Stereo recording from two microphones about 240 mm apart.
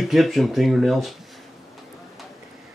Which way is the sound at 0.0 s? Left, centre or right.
Centre.